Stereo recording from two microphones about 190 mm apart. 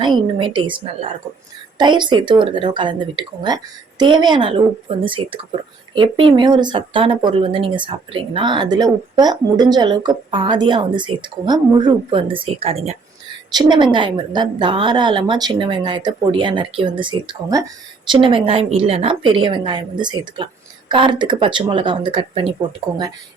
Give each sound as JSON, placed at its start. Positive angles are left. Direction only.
{"t": 0.0, "sound": "speech", "side_deg": -25}